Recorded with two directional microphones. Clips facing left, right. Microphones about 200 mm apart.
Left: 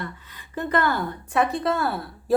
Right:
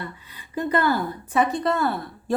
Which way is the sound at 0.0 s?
10° right (ahead or behind).